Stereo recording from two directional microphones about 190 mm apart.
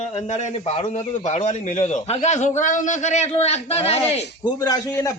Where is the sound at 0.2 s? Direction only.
35° left (ahead or behind).